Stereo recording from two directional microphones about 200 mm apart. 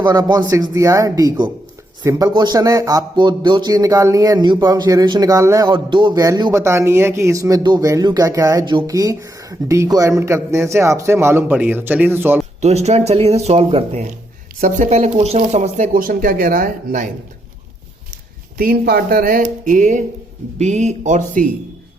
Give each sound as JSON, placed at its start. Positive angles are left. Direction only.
{"t": 0.0, "sound": "speech", "side_deg": -20}
{"t": 12.6, "sound": "speech", "side_deg": -35}
{"t": 18.5, "sound": "speech", "side_deg": -45}